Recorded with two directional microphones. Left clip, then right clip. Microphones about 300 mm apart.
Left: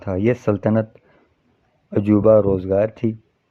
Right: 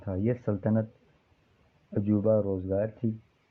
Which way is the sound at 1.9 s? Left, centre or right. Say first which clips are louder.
Left 12 dB; left.